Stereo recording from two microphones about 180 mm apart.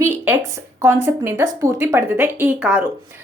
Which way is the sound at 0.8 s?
15° right (ahead or behind).